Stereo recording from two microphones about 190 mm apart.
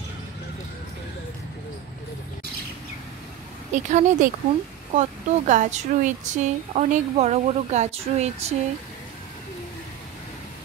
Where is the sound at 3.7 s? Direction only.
40° right (ahead or behind).